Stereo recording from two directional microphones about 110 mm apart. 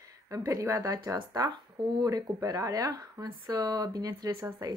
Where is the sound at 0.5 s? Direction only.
30° right (ahead or behind).